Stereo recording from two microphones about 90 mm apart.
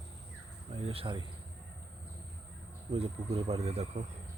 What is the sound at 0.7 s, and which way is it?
Speech, 90° right.